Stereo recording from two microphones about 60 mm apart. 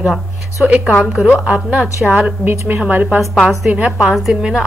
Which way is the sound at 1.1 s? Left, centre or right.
Centre.